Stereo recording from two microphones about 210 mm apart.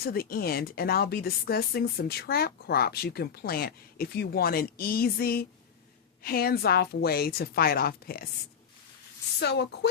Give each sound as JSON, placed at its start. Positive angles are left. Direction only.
{"t": 0.0, "sound": "a woman's voice", "side_deg": 45}
{"t": 9.4, "sound": "a woman's voice", "side_deg": 50}